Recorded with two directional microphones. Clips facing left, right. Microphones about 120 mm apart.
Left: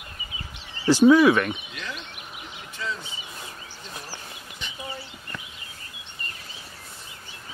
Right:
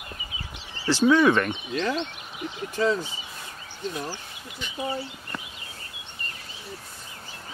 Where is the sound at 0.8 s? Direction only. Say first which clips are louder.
Left 4 dB; 15° left (ahead or behind).